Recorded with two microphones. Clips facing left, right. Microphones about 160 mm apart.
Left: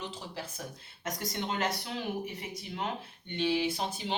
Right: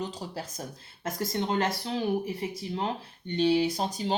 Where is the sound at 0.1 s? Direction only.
40° right (ahead or behind).